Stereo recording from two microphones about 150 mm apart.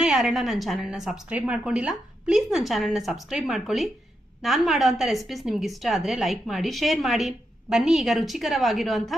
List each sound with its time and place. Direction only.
0.0 s a woman's voice: centre (ahead or behind)